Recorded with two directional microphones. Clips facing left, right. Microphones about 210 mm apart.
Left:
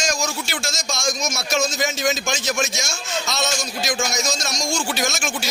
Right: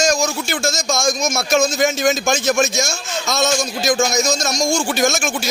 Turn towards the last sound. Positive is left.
turn(degrees=-50)  # may be behind; listen again after turning